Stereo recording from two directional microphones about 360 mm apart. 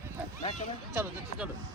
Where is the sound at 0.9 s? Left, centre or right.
Centre.